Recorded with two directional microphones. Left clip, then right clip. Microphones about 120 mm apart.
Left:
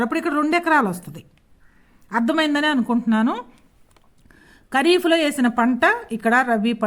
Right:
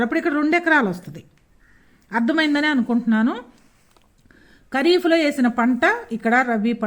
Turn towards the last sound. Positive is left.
turn(degrees=25)  # may be behind; listen again after turning